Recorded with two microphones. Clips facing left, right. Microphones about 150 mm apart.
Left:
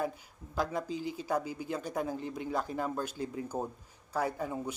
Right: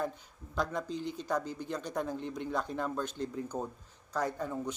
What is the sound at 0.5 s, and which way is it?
Speech, 5° left (ahead or behind).